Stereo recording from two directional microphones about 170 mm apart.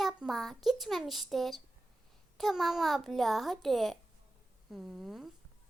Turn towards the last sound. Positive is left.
turn(degrees=0)  # may be behind; listen again after turning